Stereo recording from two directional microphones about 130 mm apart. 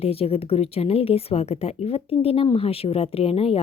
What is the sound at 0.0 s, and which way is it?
Speech, 50° left (ahead or behind).